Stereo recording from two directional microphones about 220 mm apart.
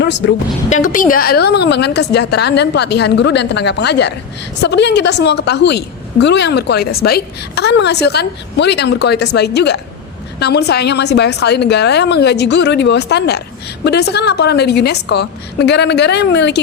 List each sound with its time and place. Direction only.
0.0 s speech: 55° left (ahead or behind)
0.7 s a woman's voice: 35° left (ahead or behind)